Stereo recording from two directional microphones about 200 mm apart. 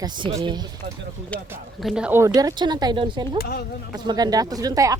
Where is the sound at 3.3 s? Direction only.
50° left (ahead or behind).